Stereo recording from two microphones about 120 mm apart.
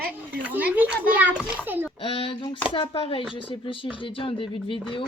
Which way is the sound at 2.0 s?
50° left (ahead or behind).